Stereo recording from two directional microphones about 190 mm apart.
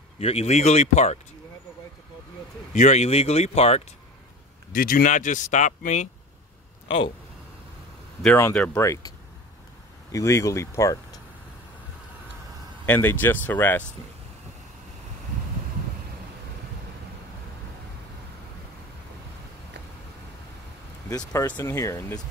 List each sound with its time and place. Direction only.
0.2 s speech: 35° left (ahead or behind)
2.7 s speech: 40° left (ahead or behind)
4.7 s speech: 50° left (ahead or behind)
8.4 s speech: 10° left (ahead or behind)
10.1 s speech: 15° left (ahead or behind)
12.8 s speech: 10° left (ahead or behind)
21.1 s speech: 20° left (ahead or behind)